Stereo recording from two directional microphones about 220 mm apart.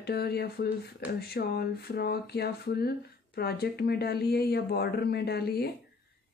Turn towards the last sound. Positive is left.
turn(degrees=45)  # may be behind; listen again after turning